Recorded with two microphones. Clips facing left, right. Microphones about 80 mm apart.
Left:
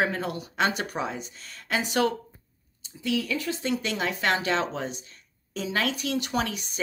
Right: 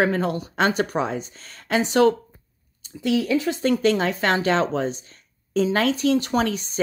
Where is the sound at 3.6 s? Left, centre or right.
Right.